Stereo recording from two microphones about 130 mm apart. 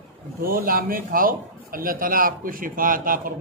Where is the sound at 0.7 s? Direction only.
90° right.